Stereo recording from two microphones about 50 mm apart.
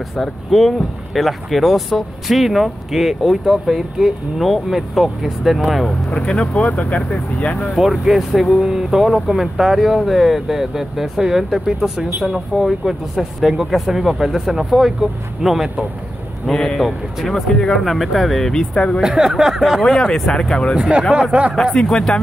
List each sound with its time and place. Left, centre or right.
0.2 s speech: centre
6.0 s speech: left
7.7 s speech: centre
16.4 s speech: centre
17.8 s speech: centre
18.9 s speech: centre
20.3 s speech: centre
20.7 s speech: right
21.9 s speech: centre